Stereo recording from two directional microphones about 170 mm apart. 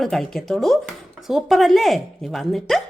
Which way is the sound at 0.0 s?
Centre (ahead or behind).